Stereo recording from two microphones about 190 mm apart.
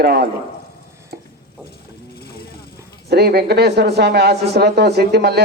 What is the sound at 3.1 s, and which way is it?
Speech, 55° right (ahead or behind).